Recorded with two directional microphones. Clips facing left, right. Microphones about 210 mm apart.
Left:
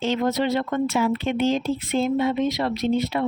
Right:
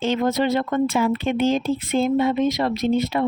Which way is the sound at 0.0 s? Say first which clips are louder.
Right 2 dB; 50° right (ahead or behind).